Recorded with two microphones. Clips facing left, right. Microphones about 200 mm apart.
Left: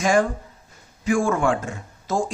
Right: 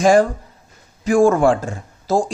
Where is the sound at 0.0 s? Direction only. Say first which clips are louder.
Right 6 dB; 35° right (ahead or behind).